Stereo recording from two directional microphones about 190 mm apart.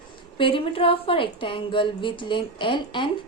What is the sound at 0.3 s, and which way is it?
A woman's voice, 25° left (ahead or behind).